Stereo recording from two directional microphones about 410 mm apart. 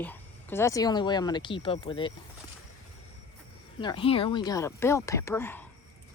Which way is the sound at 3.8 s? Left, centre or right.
Centre.